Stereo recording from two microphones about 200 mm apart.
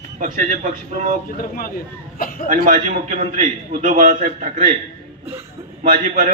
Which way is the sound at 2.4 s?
40° right (ahead or behind).